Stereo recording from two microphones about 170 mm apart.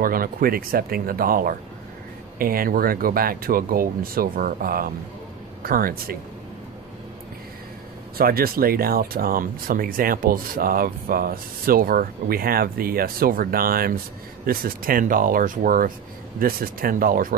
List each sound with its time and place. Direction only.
0.0 s speech: 55° right (ahead or behind)
8.2 s speech: 60° right (ahead or behind)